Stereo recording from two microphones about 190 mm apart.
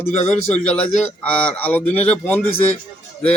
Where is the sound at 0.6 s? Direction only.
5° left (ahead or behind).